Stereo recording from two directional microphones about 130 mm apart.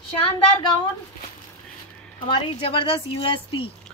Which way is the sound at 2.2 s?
45° left (ahead or behind).